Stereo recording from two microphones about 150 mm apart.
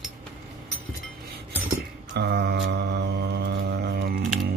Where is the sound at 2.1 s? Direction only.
90° right.